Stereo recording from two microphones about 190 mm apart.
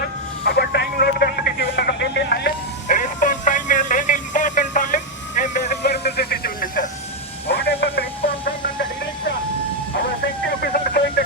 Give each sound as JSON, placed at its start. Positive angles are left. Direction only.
{"t": 0.4, "sound": "radio", "side_deg": 60}
{"t": 2.8, "sound": "music", "side_deg": 45}
{"t": 5.8, "sound": "radio", "side_deg": 60}
{"t": 7.4, "sound": "a sound", "side_deg": 60}
{"t": 10.6, "sound": "radio", "side_deg": 55}